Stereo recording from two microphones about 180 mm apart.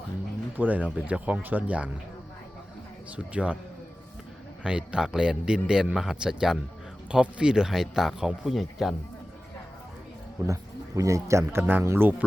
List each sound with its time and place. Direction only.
0.5 s speech: 10° right (ahead or behind)
3.2 s speech: 5° right (ahead or behind)
4.6 s a man's voice: 5° right (ahead or behind)
10.4 s speech: 15° right (ahead or behind)